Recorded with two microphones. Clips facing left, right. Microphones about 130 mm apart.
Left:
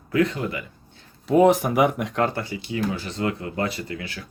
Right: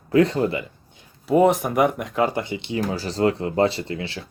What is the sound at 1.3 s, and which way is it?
Speech, centre (ahead or behind).